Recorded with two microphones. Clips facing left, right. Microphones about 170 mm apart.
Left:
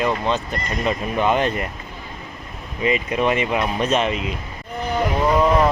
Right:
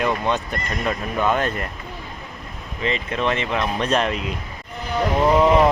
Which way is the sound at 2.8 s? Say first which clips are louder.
Left 3 dB; 10° left (ahead or behind).